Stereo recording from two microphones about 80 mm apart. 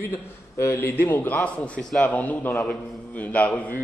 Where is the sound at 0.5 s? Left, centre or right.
Left.